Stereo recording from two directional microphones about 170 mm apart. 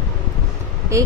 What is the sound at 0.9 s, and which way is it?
Speech, 15° right (ahead or behind).